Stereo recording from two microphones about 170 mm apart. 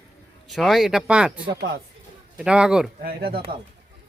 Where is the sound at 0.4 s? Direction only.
Centre (ahead or behind).